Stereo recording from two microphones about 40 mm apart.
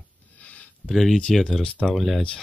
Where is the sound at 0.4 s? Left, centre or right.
Left.